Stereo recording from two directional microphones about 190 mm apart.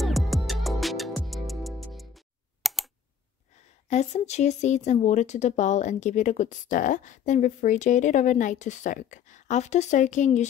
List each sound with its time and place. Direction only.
0.0 s music: centre (ahead or behind)
3.9 s speech: 35° left (ahead or behind)